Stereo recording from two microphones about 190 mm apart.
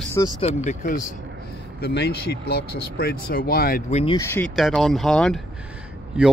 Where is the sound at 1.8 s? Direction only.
60° left (ahead or behind).